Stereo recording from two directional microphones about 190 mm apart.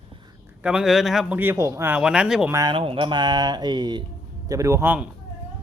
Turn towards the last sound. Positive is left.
turn(degrees=-10)  # may be behind; listen again after turning